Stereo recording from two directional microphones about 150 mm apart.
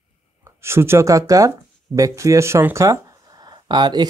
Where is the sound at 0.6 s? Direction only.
15° right (ahead or behind).